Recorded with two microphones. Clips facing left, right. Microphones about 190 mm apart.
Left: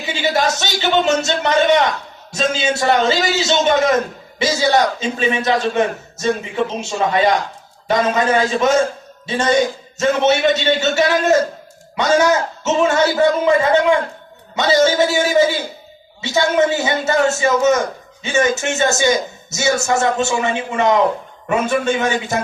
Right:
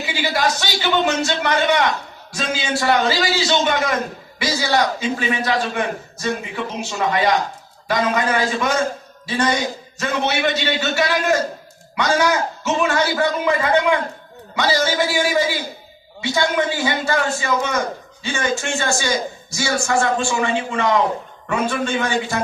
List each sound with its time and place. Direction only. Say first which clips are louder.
0.0 s a man's voice: left 3 dB; 25° left (ahead or behind)